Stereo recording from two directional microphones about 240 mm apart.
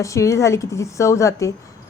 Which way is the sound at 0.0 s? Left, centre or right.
Centre.